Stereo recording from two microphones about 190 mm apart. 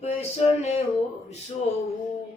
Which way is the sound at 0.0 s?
30° left (ahead or behind).